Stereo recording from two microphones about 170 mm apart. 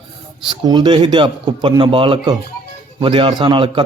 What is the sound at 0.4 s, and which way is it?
A man's voice, 25° right (ahead or behind).